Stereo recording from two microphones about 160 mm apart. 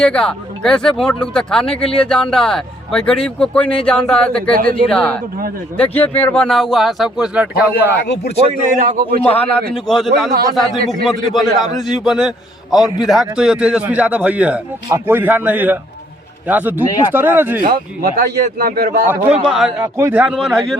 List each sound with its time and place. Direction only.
0.0 s speech: 5° left (ahead or behind)
8.0 s speech: 90° left
8.7 s a man's voice: 55° right (ahead or behind)
9.3 s a man's voice: 5° left (ahead or behind); by 17.6 s 10° right (ahead or behind)
18.2 s speech: 70° right (ahead or behind)
19.2 s a man's voice: 40° right (ahead or behind)
19.5 s speech: centre (ahead or behind)
19.8 s a man's voice: 15° right (ahead or behind)